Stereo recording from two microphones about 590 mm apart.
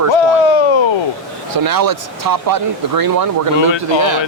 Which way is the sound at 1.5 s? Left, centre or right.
Right.